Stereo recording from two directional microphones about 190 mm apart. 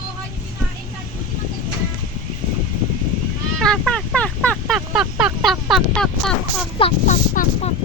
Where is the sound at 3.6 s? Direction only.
5° left (ahead or behind).